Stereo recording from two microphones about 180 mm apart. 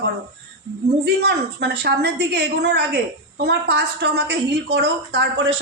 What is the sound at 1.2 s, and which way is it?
A woman's voice, 65° right (ahead or behind).